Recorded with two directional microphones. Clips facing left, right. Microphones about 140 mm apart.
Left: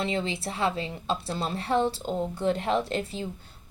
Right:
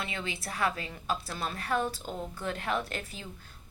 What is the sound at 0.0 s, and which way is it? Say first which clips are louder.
A woman's voice: left 8 dB; 30° left (ahead or behind).